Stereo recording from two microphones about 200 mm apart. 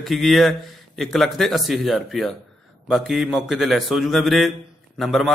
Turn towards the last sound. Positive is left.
turn(degrees=0)  # may be behind; listen again after turning